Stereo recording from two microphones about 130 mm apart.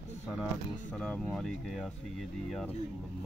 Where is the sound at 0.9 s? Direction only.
5° left (ahead or behind).